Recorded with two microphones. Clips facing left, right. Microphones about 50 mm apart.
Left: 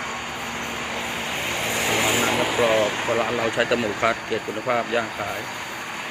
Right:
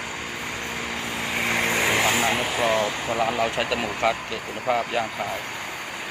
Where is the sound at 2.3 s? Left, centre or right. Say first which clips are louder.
Left 3 dB; centre.